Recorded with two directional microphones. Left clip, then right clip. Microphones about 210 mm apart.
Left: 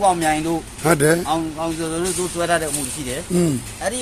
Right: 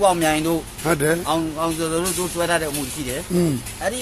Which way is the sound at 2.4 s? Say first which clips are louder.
Left 1 dB; 5° right (ahead or behind).